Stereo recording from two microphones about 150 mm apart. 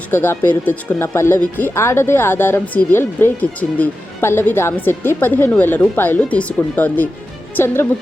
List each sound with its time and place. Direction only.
0.1 s speech: 15° left (ahead or behind)